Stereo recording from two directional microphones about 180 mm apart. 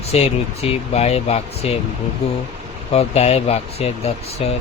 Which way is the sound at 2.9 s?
35° left (ahead or behind).